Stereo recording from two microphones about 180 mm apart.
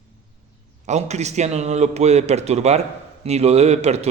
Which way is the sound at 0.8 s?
40° right (ahead or behind).